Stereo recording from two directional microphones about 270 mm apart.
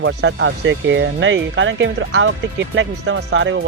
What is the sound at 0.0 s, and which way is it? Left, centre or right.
Speech, right.